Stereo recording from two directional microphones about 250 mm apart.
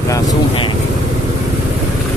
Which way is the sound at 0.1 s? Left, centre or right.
Centre.